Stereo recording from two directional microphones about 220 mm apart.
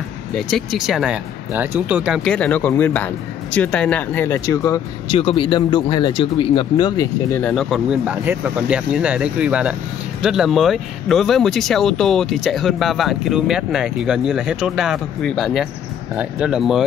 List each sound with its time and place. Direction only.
0.4 s speech: centre (ahead or behind); by 7.4 s 20° left (ahead or behind)
7.4 s speech: centre (ahead or behind)